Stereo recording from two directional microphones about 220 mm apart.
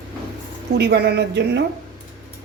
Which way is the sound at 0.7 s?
50° right (ahead or behind).